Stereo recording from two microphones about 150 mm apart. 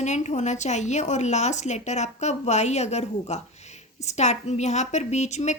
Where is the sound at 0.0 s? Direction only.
50° left (ahead or behind).